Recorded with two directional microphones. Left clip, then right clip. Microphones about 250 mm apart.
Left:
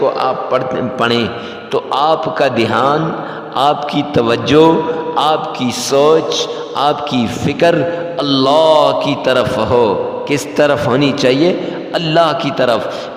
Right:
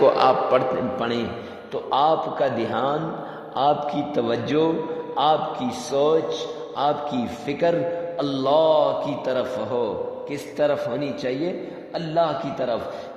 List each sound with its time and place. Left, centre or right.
0.0 s a man's voice: centre
0.9 s a man's voice: left